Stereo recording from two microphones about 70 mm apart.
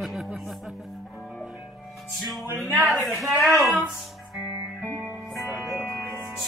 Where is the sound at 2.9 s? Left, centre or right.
Centre.